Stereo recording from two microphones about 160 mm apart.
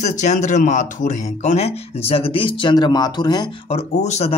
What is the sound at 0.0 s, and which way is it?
Speech, 50° left (ahead or behind).